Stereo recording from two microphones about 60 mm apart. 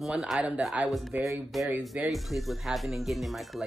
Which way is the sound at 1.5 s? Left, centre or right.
Centre.